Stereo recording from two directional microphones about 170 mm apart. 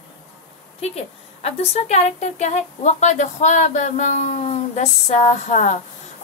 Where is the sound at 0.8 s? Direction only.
40° left (ahead or behind).